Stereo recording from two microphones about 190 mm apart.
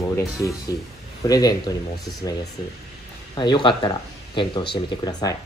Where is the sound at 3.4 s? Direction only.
25° left (ahead or behind).